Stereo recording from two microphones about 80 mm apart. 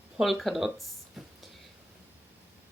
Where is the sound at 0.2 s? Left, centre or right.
Centre.